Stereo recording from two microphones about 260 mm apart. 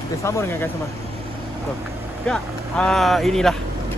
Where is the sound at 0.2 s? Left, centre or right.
Centre.